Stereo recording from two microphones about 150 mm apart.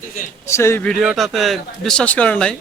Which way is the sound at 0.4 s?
20° left (ahead or behind).